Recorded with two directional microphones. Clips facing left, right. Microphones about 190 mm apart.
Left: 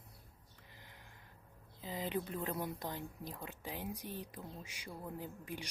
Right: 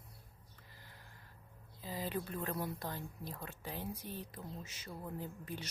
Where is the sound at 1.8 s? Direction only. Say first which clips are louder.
Left 1 dB; 20° left (ahead or behind).